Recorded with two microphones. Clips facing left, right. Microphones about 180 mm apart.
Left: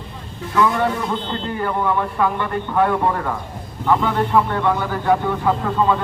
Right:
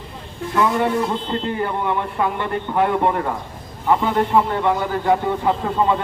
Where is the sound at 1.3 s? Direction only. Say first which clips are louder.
Right 1 dB; 25° right (ahead or behind).